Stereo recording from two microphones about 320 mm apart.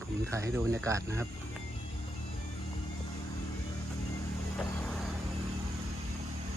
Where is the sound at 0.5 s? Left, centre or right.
Centre.